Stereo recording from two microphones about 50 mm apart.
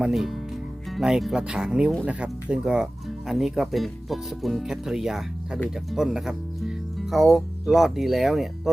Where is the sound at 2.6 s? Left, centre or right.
Centre.